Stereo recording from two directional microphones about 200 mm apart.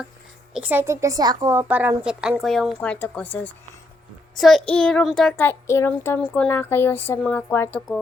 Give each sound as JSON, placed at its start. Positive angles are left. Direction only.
{"t": 0.5, "sound": "a woman's voice", "side_deg": -10}
{"t": 4.4, "sound": "child singing", "side_deg": 0}